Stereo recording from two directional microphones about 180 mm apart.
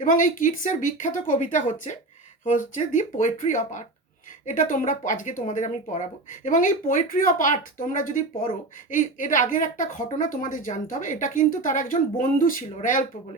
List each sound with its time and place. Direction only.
0.0 s a woman's voice: 45° left (ahead or behind)